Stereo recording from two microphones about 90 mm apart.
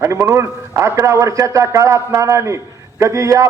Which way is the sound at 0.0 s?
30° right (ahead or behind).